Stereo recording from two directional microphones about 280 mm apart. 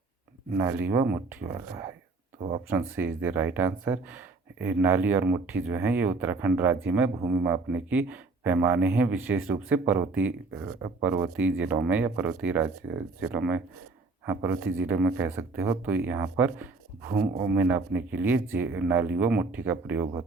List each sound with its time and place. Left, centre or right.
0.5 s speech: centre